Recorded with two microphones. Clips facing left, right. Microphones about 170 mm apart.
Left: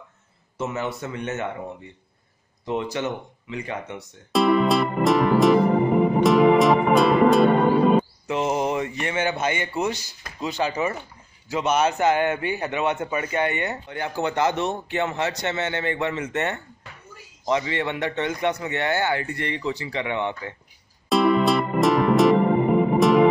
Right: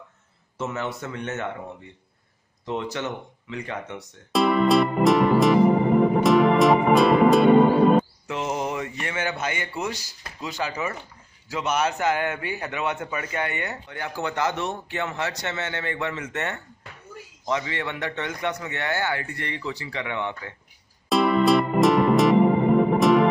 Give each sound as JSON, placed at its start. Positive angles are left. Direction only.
{"t": 0.6, "sound": "speech", "side_deg": 10}
{"t": 2.6, "sound": "music", "side_deg": 10}
{"t": 8.3, "sound": "a man's voice", "side_deg": 20}
{"t": 21.1, "sound": "music", "side_deg": 0}